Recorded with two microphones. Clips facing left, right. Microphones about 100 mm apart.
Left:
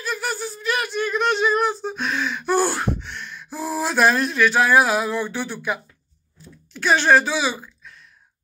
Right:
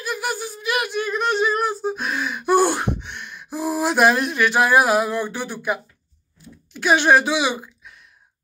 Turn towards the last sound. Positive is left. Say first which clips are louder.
# right 2 dB
turn(degrees=-15)  # may be behind; listen again after turning